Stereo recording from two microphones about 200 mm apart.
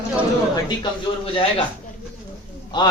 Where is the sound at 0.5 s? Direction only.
25° left (ahead or behind).